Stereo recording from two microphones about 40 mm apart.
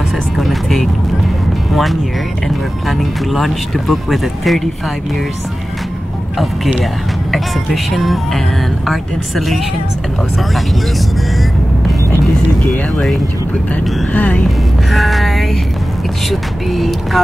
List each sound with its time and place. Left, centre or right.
0.4 s music: centre
1.7 s speech: centre
6.3 s speech: centre
14.1 s speech: left
14.9 s speech: centre